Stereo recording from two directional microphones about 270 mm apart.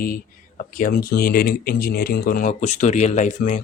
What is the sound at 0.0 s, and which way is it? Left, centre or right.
Speech, left.